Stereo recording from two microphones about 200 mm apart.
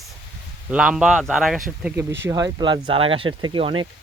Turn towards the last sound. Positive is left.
turn(degrees=-25)  # may be behind; listen again after turning